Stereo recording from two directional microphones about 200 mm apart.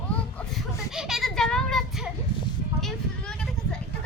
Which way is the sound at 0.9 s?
Centre (ahead or behind).